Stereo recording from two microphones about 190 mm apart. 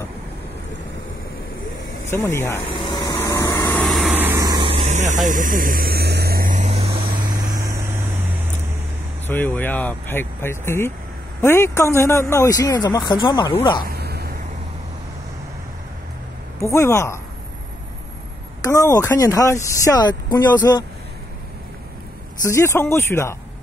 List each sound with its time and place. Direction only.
2.0 s vehicle: 15° left (ahead or behind)
3.8 s vehicle: centre (ahead or behind)
4.1 s vehicle: 10° right (ahead or behind)
9.3 s speech: 10° left (ahead or behind)
13.8 s a sound: 55° right (ahead or behind)
16.6 s speech: 15° left (ahead or behind)
18.6 s speech: 20° left (ahead or behind)
22.4 s speech: 15° left (ahead or behind)